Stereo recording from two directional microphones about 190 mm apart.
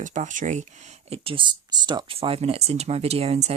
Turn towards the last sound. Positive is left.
turn(degrees=-35)  # may be behind; listen again after turning